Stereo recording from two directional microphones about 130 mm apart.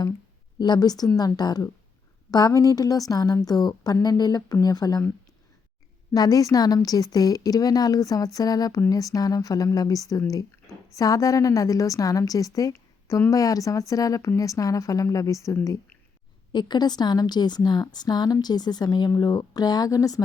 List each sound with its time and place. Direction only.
0.6 s a woman's voice: 30° left (ahead or behind)
6.1 s a woman's voice: 30° left (ahead or behind)
16.5 s a woman's voice: 35° left (ahead or behind)